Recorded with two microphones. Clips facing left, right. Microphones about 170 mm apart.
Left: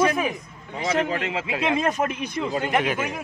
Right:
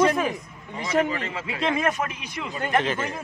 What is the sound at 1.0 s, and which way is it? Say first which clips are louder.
Speech: left 3 dB; 70° left (ahead or behind).